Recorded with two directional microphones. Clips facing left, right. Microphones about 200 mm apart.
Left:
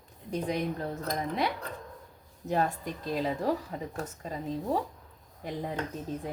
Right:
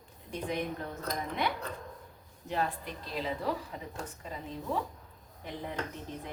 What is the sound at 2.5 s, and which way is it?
A woman's voice, 45° left (ahead or behind).